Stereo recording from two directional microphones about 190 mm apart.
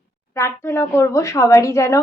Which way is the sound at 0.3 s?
15° left (ahead or behind).